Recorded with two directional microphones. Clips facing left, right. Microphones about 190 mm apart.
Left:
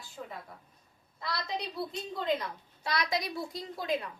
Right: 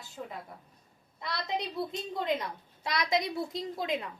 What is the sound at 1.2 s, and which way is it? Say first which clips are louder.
A woman's voice: right 2 dB; 20° right (ahead or behind).